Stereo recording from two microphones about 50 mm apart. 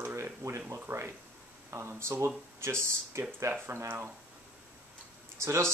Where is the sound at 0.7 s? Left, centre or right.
Right.